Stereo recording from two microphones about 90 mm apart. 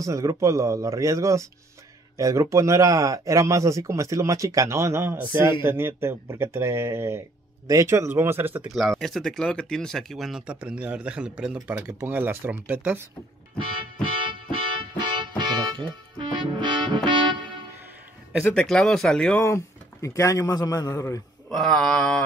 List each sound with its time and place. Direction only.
0.0 s speech: 35° right (ahead or behind)
8.7 s speech: centre (ahead or behind)
10.4 s a man's voice: 10° right (ahead or behind)
11.6 s speech: 20° right (ahead or behind)
14.0 s music: 75° right (ahead or behind)
18.4 s speech: 5° left (ahead or behind)
19.4 s speech: 35° left (ahead or behind)
21.5 s speech: 5° left (ahead or behind)